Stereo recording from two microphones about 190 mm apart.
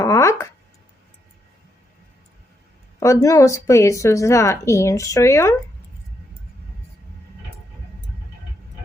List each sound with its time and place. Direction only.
0.0 s speech: 15° left (ahead or behind)
3.0 s a woman's voice: 15° left (ahead or behind)